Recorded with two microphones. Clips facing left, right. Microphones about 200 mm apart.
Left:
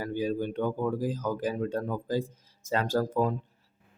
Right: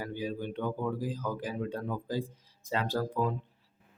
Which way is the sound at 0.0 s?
45° left (ahead or behind).